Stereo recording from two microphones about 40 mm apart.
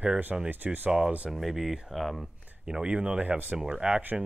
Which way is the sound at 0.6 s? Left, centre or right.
Right.